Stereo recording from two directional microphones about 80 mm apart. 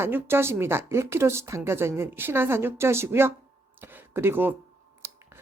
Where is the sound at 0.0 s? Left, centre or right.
Right.